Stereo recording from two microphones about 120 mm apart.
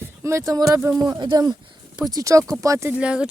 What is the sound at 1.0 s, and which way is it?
Speech, 35° right (ahead or behind).